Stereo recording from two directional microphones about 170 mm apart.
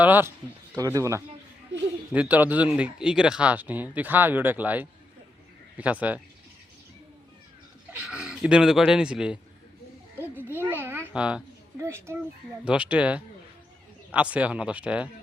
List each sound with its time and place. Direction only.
0.0 s speech: 10° right (ahead or behind)
7.9 s speech: 5° right (ahead or behind)
10.2 s a sound: 10° right (ahead or behind)
11.8 s speech: 15° right (ahead or behind)